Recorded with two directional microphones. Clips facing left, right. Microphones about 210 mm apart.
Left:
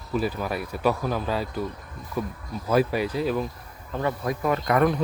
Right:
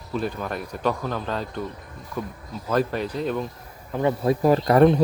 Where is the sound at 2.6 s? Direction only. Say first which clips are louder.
Left 1 dB; 10° left (ahead or behind).